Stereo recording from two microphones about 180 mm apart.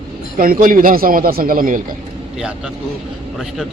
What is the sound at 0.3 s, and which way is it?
Speech, 55° right (ahead or behind).